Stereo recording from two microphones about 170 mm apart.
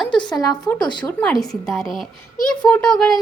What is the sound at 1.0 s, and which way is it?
A child's voice, 5° left (ahead or behind).